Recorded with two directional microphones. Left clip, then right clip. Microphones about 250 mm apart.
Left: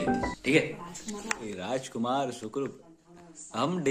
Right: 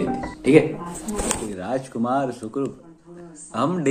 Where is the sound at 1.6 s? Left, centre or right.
Centre.